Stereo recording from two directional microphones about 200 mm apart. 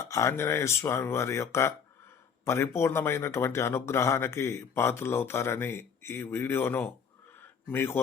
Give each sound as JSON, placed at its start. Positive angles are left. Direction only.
{"t": 0.0, "sound": "speech", "side_deg": 15}